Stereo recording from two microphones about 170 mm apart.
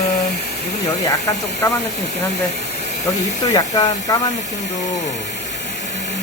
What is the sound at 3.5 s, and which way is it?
Speech, 25° left (ahead or behind).